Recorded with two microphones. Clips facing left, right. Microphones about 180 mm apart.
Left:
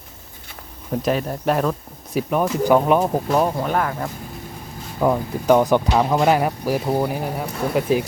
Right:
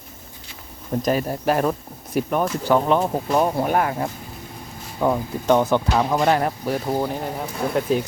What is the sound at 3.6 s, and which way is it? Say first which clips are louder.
Speech: right 1 dB; 15° right (ahead or behind).